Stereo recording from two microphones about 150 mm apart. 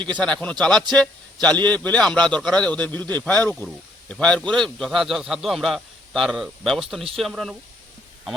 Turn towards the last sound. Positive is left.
turn(degrees=0)  # may be behind; listen again after turning